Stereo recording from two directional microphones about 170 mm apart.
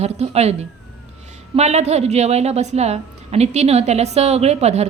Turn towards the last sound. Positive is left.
turn(degrees=-40)  # may be behind; listen again after turning